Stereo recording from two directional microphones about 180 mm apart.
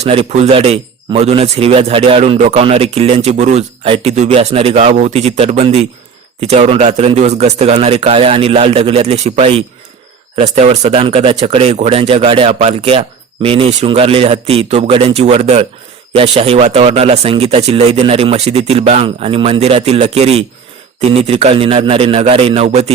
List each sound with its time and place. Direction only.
0.0 s a man's voice: 35° right (ahead or behind)